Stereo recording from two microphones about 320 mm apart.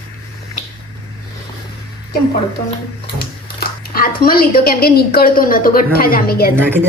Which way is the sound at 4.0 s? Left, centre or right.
Left.